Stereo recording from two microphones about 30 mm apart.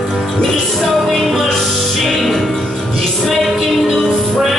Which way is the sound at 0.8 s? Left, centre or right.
Centre.